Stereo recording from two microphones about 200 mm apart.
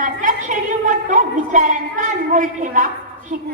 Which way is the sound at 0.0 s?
40° right (ahead or behind).